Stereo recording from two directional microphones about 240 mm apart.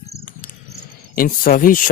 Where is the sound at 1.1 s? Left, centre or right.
Left.